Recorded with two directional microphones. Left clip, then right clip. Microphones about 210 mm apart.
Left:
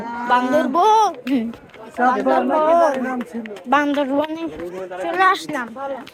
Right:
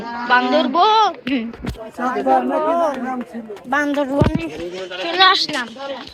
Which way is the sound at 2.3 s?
35° left (ahead or behind).